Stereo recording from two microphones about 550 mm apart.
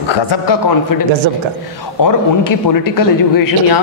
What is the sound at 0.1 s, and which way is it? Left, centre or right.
Speech, left.